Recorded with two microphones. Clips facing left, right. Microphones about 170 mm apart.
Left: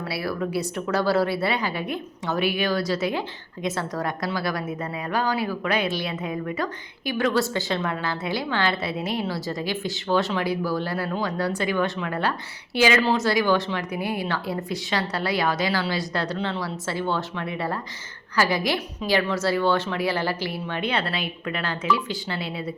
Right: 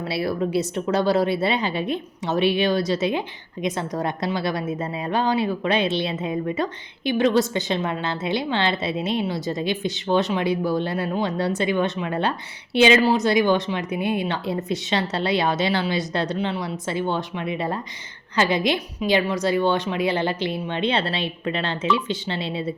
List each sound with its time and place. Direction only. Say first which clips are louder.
0.0 s a woman's voice: right 4 dB; 25° right (ahead or behind)